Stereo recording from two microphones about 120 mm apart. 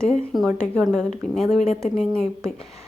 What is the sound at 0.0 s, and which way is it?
A woman's voice, 5° left (ahead or behind).